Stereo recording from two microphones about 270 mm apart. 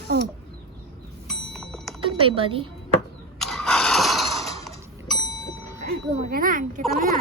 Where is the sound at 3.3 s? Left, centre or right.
Centre.